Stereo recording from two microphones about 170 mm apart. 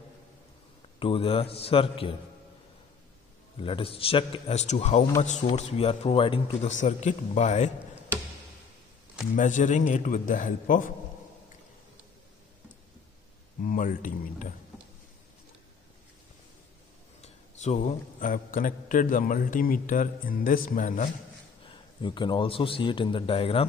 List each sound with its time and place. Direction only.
0.9 s a man's voice: 30° left (ahead or behind)
3.6 s a man's voice: 35° left (ahead or behind)
6.7 s a man's voice: 45° left (ahead or behind)
9.3 s a man's voice: 45° left (ahead or behind)
13.7 s a man's voice: 50° left (ahead or behind)
17.2 s a man's voice: 45° left (ahead or behind)
21.6 s a man's voice: 30° left (ahead or behind)